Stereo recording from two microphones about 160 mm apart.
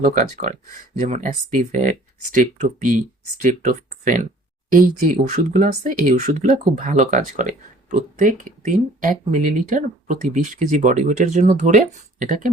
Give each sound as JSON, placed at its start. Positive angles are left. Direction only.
{"t": 0.0, "sound": "speech", "side_deg": -50}